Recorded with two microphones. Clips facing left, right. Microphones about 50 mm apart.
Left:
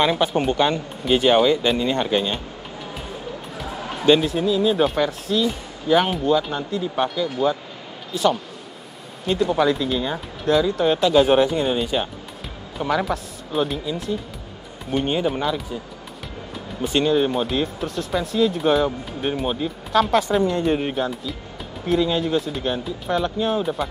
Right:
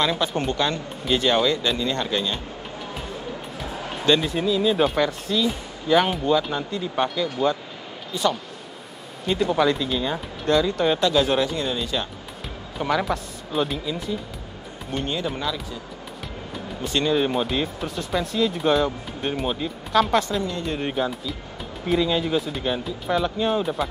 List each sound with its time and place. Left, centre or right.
0.0 s speech: left
4.2 s speech: centre
9.2 s speech: centre
12.7 s speech: centre
15.0 s speech: left
16.8 s speech: centre
20.2 s speech: left
20.8 s speech: centre